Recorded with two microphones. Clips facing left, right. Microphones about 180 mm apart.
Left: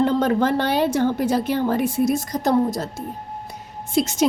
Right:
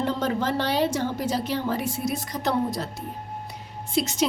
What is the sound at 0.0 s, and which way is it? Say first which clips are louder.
A woman's voice: left 7 dB; 55° left (ahead or behind).